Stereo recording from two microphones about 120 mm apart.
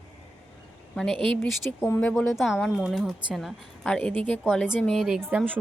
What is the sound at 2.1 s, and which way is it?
A woman's voice, centre (ahead or behind).